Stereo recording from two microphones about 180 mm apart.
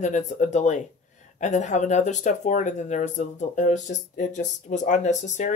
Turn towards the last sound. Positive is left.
turn(degrees=40)  # may be behind; listen again after turning